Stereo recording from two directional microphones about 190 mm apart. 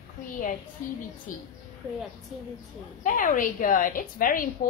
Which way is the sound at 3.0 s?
45° left (ahead or behind).